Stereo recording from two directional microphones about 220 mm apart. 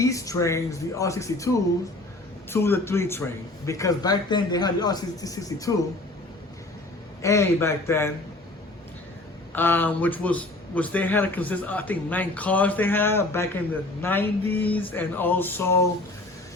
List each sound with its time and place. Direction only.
0.0 s a man's voice: 15° left (ahead or behind)
2.5 s a man's voice: 10° left (ahead or behind)
7.2 s a man's voice: 15° left (ahead or behind)
9.5 s a man's voice: 10° left (ahead or behind)